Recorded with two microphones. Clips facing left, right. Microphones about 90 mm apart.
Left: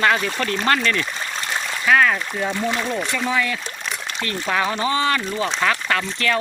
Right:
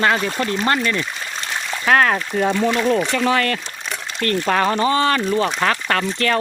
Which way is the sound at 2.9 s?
75° right (ahead or behind).